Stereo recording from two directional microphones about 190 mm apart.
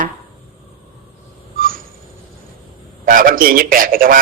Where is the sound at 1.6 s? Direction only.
50° right (ahead or behind).